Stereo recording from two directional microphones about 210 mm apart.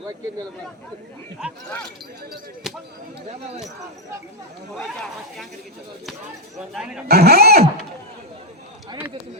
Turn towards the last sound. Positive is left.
turn(degrees=-50)  # may be behind; listen again after turning